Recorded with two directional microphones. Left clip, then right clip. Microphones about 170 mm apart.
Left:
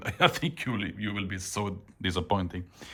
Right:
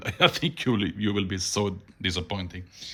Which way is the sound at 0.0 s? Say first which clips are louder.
Right 3 dB; 5° right (ahead or behind).